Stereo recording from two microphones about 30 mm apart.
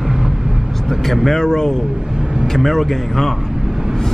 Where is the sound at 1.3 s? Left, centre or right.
Left.